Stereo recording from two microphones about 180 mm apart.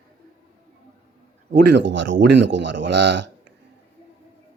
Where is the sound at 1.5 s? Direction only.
70° right (ahead or behind).